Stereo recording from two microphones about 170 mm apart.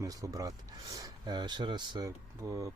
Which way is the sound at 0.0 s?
20° right (ahead or behind).